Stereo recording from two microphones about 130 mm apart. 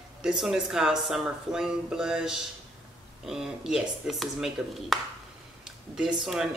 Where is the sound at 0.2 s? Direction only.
5° right (ahead or behind).